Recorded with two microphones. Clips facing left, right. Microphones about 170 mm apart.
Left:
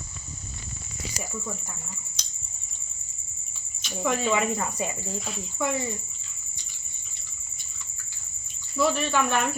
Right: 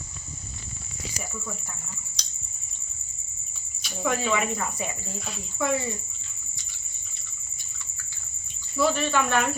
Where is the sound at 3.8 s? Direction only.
Centre (ahead or behind).